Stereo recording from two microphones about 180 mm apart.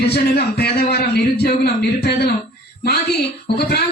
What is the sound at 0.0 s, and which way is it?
A man's voice, 65° left (ahead or behind).